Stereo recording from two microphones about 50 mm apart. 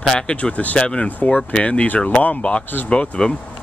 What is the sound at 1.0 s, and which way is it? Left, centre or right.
Speech, left.